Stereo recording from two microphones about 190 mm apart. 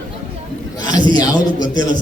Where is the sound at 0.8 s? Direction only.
20° left (ahead or behind).